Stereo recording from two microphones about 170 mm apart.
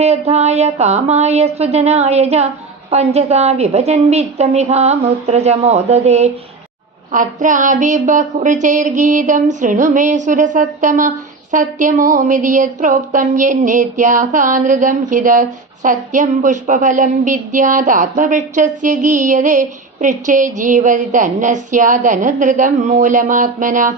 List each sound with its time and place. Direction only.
0.0 s a woman's voice: 40° right (ahead or behind)
7.1 s speech: 50° right (ahead or behind)